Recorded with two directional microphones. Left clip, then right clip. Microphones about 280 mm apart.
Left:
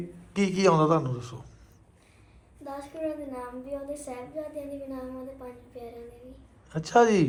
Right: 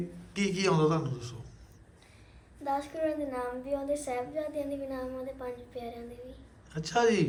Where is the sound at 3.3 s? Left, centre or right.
Centre.